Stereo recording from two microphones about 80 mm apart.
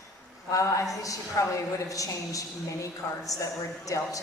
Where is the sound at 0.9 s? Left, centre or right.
Left.